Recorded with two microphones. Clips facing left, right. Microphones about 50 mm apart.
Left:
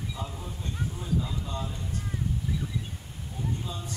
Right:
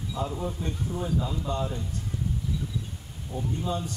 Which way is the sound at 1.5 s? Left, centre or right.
Right.